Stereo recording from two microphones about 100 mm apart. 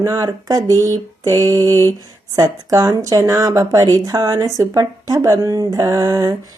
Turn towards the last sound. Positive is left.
turn(degrees=-35)  # may be behind; listen again after turning